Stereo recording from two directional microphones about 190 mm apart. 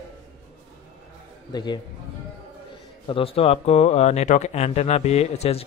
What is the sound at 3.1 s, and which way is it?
Speech, 30° left (ahead or behind).